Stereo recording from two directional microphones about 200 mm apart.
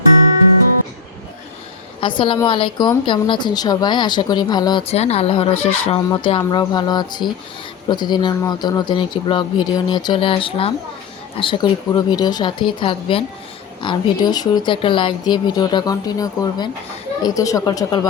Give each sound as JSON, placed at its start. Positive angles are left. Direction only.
{"t": 2.0, "sound": "a woman's voice", "side_deg": 25}